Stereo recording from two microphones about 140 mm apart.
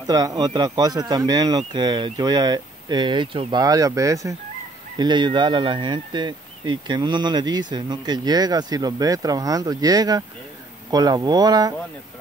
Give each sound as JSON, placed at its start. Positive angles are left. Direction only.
{"t": 0.0, "sound": "speech", "side_deg": -25}